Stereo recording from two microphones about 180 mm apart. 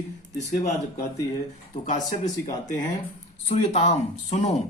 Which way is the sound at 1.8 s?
40° left (ahead or behind).